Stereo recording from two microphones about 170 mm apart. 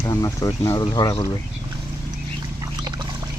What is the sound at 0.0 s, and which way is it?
Speech, 20° left (ahead or behind).